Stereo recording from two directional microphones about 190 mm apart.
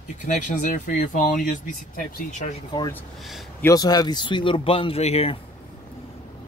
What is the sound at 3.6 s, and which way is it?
Speech, 20° left (ahead or behind).